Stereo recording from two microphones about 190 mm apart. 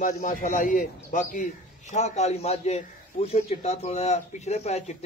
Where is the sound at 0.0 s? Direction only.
45° left (ahead or behind).